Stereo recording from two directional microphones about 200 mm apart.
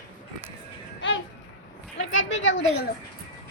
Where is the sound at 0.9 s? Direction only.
70° left (ahead or behind).